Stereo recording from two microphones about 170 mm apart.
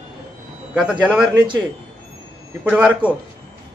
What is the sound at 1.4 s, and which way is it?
Speech, 25° right (ahead or behind).